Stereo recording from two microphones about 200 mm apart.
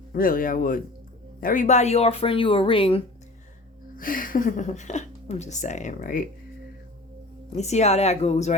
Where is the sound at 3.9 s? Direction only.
45° left (ahead or behind).